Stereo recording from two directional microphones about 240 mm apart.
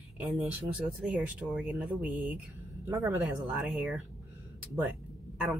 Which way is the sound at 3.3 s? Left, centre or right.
Centre.